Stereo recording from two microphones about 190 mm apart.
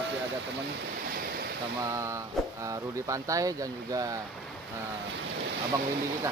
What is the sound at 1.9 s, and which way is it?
Speech, 15° right (ahead or behind).